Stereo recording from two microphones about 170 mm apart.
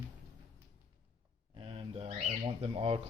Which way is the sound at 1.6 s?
35° right (ahead or behind).